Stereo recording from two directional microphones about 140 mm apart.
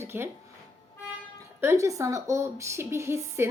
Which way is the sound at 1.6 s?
20° right (ahead or behind).